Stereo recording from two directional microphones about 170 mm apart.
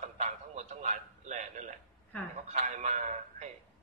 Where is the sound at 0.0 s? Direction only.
45° right (ahead or behind).